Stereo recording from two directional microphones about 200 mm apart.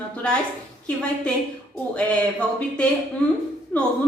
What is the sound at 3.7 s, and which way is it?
Speech, 5° left (ahead or behind).